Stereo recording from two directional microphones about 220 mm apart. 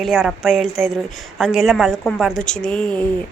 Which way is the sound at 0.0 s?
Centre (ahead or behind).